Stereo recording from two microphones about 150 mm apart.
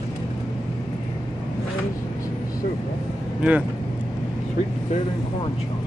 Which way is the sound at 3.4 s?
10° right (ahead or behind).